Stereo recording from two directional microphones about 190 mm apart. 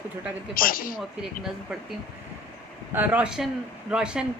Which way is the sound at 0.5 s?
50° left (ahead or behind).